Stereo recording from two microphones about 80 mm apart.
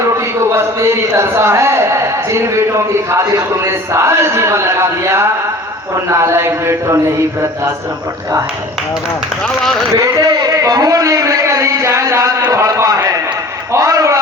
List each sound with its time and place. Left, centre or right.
0.5 s a man's voice: right
10.2 s a man's voice: right
13.7 s a sound: right